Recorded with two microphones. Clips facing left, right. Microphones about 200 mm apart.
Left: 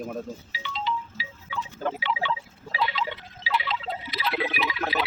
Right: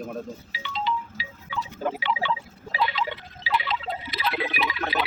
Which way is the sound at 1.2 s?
50° right (ahead or behind).